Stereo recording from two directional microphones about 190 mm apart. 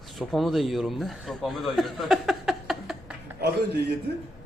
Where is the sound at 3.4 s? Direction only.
60° right (ahead or behind).